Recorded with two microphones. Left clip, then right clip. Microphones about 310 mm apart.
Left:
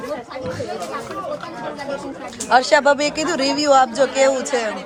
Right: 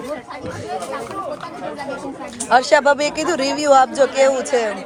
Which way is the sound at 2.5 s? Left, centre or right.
Centre.